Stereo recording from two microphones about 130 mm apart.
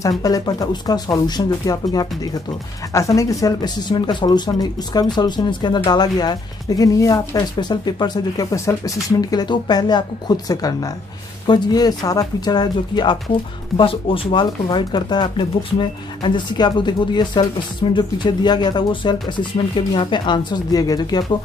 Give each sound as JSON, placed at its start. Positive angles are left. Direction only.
{"t": 0.2, "sound": "speech", "side_deg": 30}